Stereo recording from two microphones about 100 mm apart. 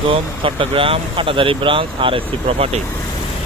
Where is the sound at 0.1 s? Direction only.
60° right (ahead or behind); by 2.8 s 80° right.